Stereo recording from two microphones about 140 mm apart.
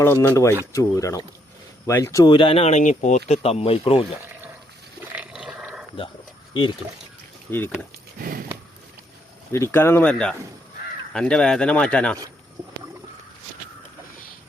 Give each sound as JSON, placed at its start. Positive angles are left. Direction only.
{"t": 0.0, "sound": "speech", "side_deg": 20}
{"t": 2.3, "sound": "speech", "side_deg": 40}
{"t": 5.1, "sound": "a sound", "side_deg": -10}
{"t": 6.5, "sound": "speech", "side_deg": 35}
{"t": 7.5, "sound": "speech", "side_deg": 15}
{"t": 8.2, "sound": "a sound", "side_deg": -90}
{"t": 9.5, "sound": "speech", "side_deg": 20}